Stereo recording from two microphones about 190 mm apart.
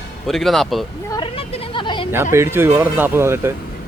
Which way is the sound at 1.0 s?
25° left (ahead or behind).